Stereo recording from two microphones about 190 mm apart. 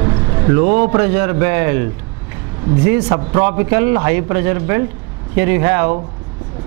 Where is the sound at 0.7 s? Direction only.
15° right (ahead or behind).